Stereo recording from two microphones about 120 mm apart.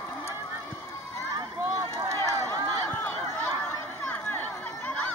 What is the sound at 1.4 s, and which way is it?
Run, 35° right (ahead or behind).